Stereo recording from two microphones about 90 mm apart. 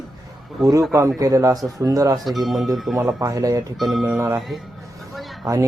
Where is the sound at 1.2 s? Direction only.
40° right (ahead or behind).